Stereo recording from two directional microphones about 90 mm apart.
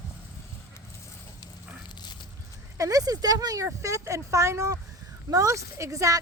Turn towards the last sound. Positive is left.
turn(degrees=-35)  # may be behind; listen again after turning